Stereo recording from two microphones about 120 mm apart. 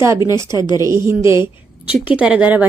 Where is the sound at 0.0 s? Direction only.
25° right (ahead or behind).